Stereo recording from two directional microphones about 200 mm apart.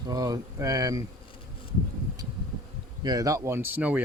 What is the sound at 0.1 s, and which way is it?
Speech, 15° right (ahead or behind).